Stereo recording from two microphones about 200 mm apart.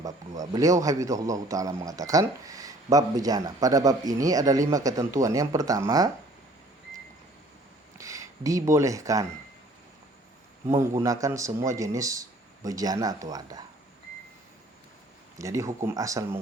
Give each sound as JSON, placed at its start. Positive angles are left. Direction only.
{"t": 0.0, "sound": "a man's voice", "side_deg": -15}
{"t": 7.9, "sound": "speech", "side_deg": -15}
{"t": 10.7, "sound": "a man's voice", "side_deg": -15}
{"t": 15.4, "sound": "a man's voice", "side_deg": -15}